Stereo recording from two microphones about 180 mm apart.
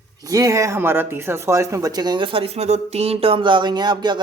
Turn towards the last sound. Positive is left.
turn(degrees=-25)  # may be behind; listen again after turning